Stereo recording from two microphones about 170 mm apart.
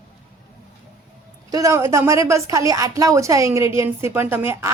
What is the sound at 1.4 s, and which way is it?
Speech, 20° right (ahead or behind).